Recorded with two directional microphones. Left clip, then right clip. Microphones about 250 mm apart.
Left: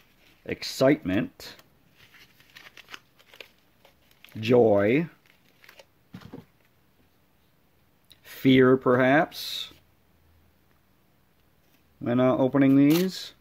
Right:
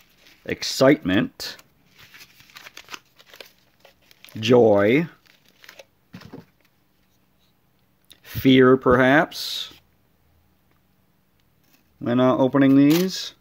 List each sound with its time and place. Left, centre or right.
0.5 s speech: centre
2.7 s scissors: right
4.2 s speech: centre
5.6 s a sound: centre
8.1 s speech: centre
12.0 s speech: centre